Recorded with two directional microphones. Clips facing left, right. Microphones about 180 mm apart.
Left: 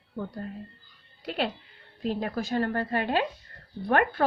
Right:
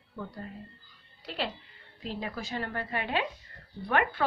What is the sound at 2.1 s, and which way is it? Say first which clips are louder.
A woman's voice: left 7 dB; 55° left (ahead or behind).